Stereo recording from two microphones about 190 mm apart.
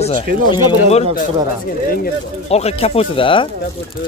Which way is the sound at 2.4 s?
35° left (ahead or behind).